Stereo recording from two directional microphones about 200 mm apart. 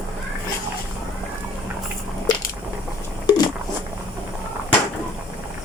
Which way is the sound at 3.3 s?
20° left (ahead or behind).